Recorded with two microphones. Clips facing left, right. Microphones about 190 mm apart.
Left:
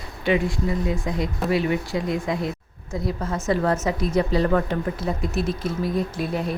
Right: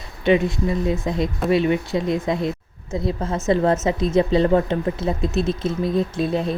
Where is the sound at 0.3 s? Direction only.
20° right (ahead or behind).